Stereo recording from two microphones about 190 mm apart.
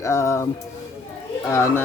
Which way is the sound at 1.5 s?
15° left (ahead or behind).